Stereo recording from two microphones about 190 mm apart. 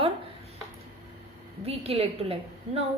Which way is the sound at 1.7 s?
30° right (ahead or behind).